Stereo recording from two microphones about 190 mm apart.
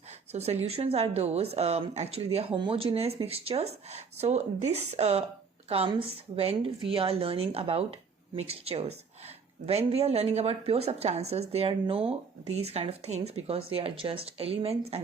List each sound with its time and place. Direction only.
0.3 s a woman's voice: 35° right (ahead or behind)